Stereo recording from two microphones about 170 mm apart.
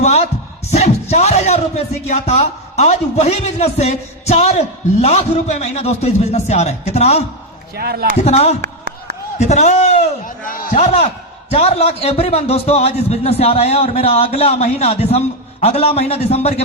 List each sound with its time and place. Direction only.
0.0 s speech: 40° left (ahead or behind)
7.8 s speech: 65° right (ahead or behind)
8.2 s speech: 40° left (ahead or behind)
8.6 s a sound: 75° right (ahead or behind)
9.4 s a man's voice: 45° left (ahead or behind)
10.8 s speech: 35° left (ahead or behind)